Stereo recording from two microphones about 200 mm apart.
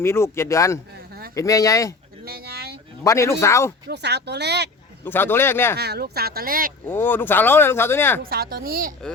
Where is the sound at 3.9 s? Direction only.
60° right (ahead or behind).